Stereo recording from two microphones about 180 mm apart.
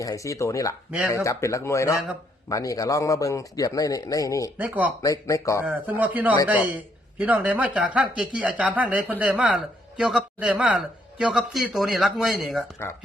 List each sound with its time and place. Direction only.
0.0 s speech: 20° left (ahead or behind)
4.5 s speech: 10° right (ahead or behind)
5.0 s speech: 15° left (ahead or behind)
5.6 s speech: 10° right (ahead or behind)